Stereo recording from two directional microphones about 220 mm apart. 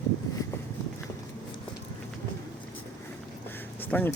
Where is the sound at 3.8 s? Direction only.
5° left (ahead or behind).